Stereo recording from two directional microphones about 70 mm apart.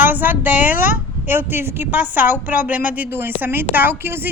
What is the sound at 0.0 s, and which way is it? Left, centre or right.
A woman's voice, right.